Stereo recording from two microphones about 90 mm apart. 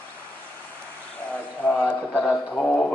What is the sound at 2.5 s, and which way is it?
Mantra, 15° left (ahead or behind).